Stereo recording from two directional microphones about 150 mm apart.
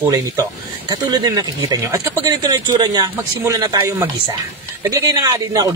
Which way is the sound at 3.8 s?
15° right (ahead or behind).